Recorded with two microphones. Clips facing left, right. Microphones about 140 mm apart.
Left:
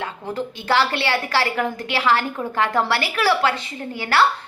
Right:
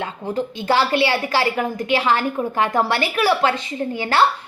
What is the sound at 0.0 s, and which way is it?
A woman's voice, 15° right (ahead or behind).